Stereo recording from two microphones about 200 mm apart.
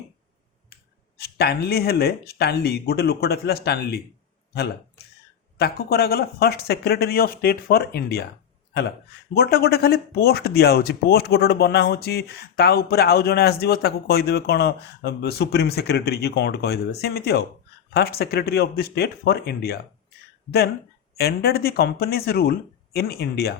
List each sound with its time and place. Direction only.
1.2 s speech: 55° left (ahead or behind)
5.5 s speech: 50° left (ahead or behind)
9.3 s speech: 50° left (ahead or behind)
21.2 s speech: 50° left (ahead or behind)